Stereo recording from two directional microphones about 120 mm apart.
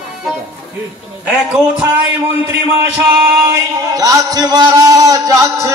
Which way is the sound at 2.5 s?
20° right (ahead or behind).